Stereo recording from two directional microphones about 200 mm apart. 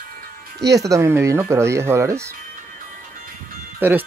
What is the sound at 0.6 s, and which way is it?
Speech, 15° right (ahead or behind).